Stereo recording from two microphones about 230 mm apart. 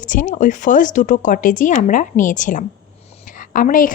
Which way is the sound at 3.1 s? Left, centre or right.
Left.